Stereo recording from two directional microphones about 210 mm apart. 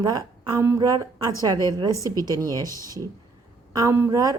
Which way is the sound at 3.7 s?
15° right (ahead or behind).